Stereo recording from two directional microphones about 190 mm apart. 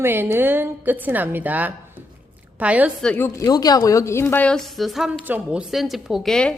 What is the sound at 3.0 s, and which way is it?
A woman's voice, 10° left (ahead or behind).